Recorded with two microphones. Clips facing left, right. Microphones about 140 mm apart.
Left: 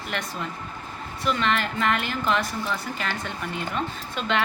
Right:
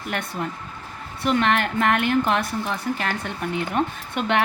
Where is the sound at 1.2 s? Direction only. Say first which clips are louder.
Right 4 dB; 55° right (ahead or behind).